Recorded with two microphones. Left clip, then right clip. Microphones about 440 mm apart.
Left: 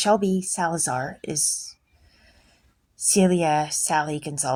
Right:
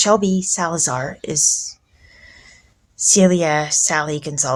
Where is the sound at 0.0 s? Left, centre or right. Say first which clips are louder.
Right 5 dB; left.